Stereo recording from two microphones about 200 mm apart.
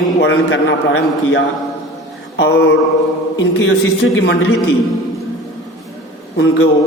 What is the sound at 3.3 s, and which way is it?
Speech, 75° left (ahead or behind).